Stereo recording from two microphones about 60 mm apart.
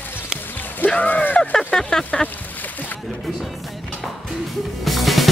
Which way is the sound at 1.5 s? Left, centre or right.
Centre.